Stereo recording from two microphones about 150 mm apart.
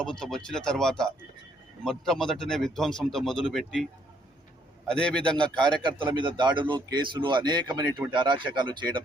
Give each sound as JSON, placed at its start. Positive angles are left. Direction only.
{"t": 0.0, "sound": "speech", "side_deg": 5}
{"t": 4.9, "sound": "a man's voice", "side_deg": 5}
{"t": 5.6, "sound": "speech", "side_deg": -30}